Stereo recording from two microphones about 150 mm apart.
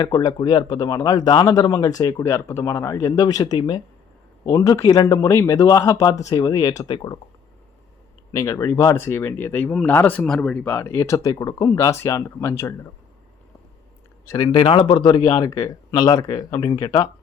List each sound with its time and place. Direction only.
0.0 s speech: 25° left (ahead or behind)
8.3 s speech: 20° left (ahead or behind)
14.3 s speech: 30° left (ahead or behind)